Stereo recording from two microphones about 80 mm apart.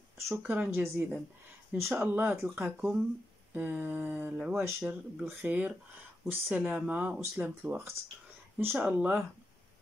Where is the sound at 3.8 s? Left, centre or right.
Right.